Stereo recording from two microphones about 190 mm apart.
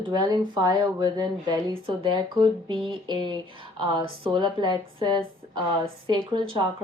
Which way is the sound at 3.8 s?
25° right (ahead or behind).